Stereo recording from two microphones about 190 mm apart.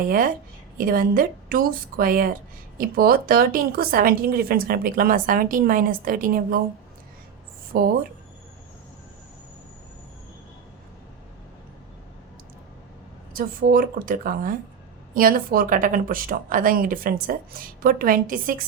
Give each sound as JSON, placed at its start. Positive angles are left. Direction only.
{"t": 0.8, "sound": "a woman's voice", "side_deg": -50}
{"t": 7.7, "sound": "a woman's voice", "side_deg": -50}
{"t": 13.3, "sound": "a woman's voice", "side_deg": -50}